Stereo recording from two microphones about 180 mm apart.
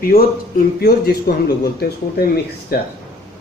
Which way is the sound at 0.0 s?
55° left (ahead or behind).